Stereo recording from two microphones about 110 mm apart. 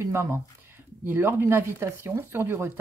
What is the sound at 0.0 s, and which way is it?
Speech, 25° right (ahead or behind).